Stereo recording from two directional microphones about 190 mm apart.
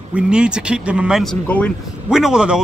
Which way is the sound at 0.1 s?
5° right (ahead or behind).